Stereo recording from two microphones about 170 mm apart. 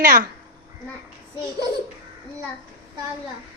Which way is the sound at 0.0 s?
55° right (ahead or behind).